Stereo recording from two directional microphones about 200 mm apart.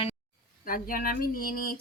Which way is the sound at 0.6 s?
45° left (ahead or behind).